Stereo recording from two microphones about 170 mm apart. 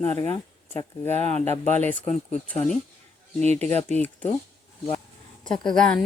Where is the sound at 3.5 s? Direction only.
40° right (ahead or behind).